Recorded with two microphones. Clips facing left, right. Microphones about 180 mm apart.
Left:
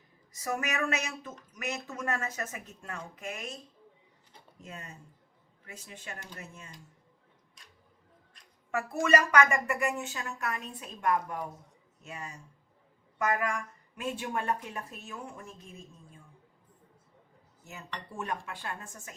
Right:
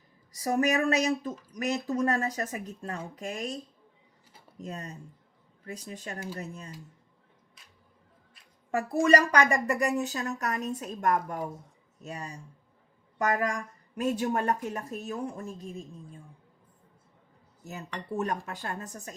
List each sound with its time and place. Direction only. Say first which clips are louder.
0.3 s a woman's voice: right 7 dB; 35° right (ahead or behind)
4.6 s a woman's voice: right 7 dB; 40° right (ahead or behind)
9.0 s a woman's voice: right 2 dB; 35° right (ahead or behind)
18.1 s a woman's voice: right 6 dB; 40° right (ahead or behind)